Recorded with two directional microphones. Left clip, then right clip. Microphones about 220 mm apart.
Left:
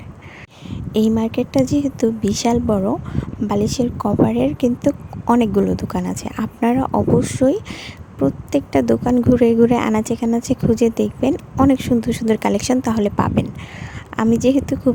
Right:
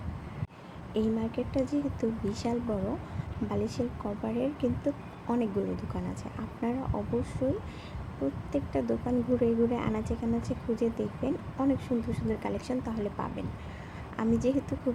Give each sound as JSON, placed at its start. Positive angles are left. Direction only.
{"t": 0.9, "sound": "a woman's voice", "side_deg": 45}